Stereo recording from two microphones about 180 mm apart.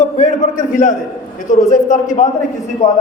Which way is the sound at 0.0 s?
40° left (ahead or behind).